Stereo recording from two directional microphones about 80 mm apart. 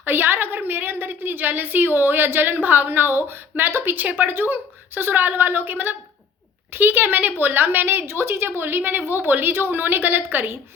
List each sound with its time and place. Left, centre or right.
0.0 s a woman's voice: right